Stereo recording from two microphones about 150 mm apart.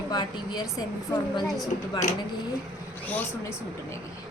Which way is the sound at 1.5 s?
Centre (ahead or behind).